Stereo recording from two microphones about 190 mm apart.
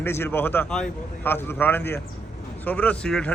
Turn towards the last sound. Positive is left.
turn(degrees=5)  # may be behind; listen again after turning